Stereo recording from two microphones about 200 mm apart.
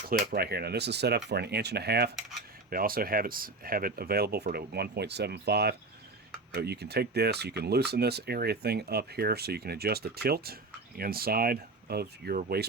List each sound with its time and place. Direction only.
0.1 s speech: 45° right (ahead or behind)